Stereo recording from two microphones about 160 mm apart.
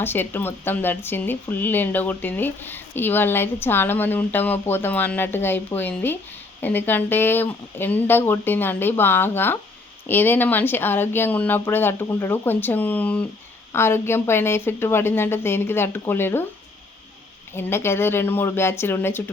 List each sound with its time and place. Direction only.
0.0 s speech: 15° left (ahead or behind)
17.5 s speech: 15° left (ahead or behind)